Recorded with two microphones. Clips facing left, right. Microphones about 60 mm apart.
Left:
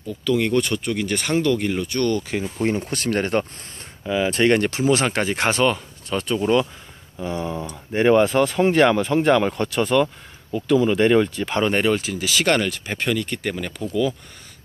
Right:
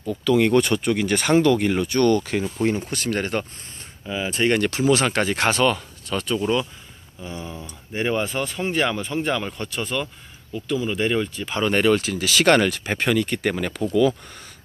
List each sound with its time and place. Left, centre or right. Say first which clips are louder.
0.2 s speech: right 2 dB; centre
2.5 s speech: left 1 dB; centre
2.8 s speech: left 2 dB; left
4.1 s speech: left 4 dB; left
4.6 s speech: even; left
7.2 s speech: left 7 dB; left
7.6 s speech: left 7 dB; left
11.7 s speech: right 1 dB; centre